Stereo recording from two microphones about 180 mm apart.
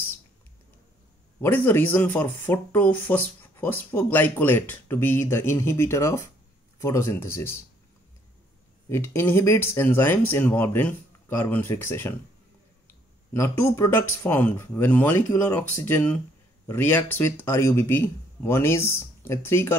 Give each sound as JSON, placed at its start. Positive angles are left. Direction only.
{"t": 1.4, "sound": "speech", "side_deg": 10}
{"t": 8.8, "sound": "speech", "side_deg": 15}